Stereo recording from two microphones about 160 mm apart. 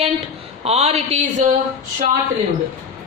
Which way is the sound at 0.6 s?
40° right (ahead or behind).